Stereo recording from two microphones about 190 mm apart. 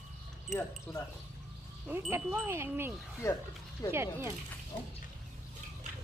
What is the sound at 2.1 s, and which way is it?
Wind chime, 10° right (ahead or behind).